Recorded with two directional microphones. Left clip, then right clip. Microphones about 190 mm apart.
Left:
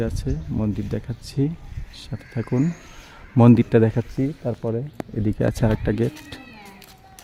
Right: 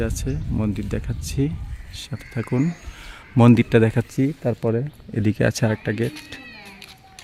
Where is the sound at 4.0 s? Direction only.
20° right (ahead or behind).